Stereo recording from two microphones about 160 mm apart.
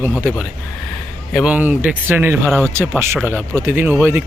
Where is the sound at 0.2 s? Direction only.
10° right (ahead or behind).